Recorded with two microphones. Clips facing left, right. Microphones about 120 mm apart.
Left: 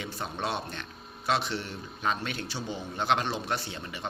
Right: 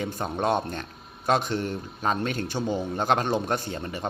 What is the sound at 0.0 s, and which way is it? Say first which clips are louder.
Speech: right 7 dB; 45° right (ahead or behind).